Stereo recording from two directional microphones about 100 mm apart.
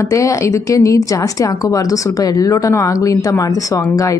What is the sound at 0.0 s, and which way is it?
Speech, 30° left (ahead or behind).